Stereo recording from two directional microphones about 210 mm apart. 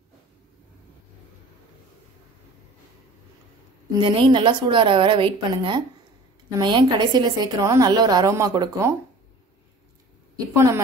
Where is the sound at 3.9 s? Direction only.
20° right (ahead or behind).